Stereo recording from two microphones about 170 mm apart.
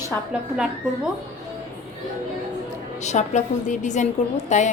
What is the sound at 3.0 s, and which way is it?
A woman's voice, 45° left (ahead or behind).